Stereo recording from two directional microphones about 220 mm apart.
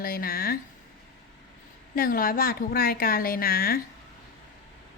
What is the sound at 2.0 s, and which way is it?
A woman's voice, 40° left (ahead or behind).